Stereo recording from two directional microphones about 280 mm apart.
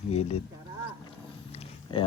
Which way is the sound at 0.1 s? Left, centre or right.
Left.